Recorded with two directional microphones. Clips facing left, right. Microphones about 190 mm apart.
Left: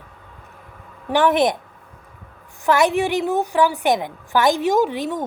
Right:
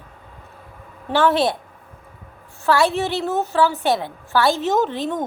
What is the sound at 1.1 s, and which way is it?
Speech, 15° left (ahead or behind).